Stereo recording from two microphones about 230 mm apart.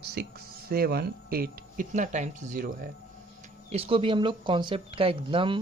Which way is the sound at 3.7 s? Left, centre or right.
Right.